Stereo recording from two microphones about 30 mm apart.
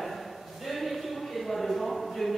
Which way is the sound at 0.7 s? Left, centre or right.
Centre.